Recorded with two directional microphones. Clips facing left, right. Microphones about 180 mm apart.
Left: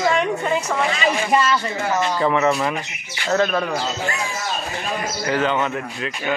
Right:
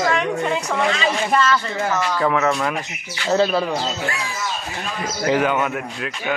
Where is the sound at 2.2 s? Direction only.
5° left (ahead or behind).